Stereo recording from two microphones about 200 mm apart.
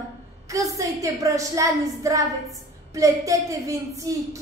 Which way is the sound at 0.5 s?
15° right (ahead or behind).